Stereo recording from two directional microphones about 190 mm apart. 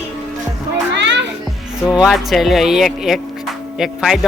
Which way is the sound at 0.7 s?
70° right (ahead or behind).